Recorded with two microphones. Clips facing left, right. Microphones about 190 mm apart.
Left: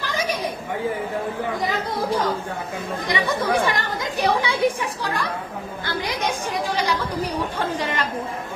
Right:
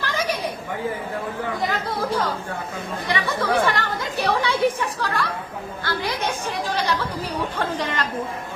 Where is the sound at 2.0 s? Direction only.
15° left (ahead or behind).